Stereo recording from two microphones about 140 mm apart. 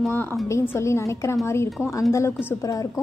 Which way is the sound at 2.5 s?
25° left (ahead or behind).